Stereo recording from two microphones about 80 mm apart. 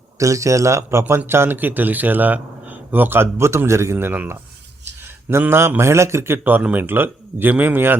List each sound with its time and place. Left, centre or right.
0.2 s a man's voice: right
3.9 s a man's voice: right
5.4 s a man's voice: right